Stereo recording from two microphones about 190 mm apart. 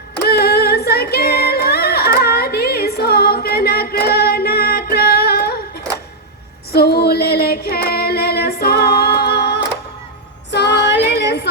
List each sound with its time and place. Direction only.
0.3 s singing: 55° left (ahead or behind)
6.7 s female singing: 55° left (ahead or behind)